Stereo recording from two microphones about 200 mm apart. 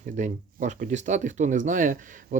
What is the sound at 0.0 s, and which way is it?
Speech, 40° right (ahead or behind).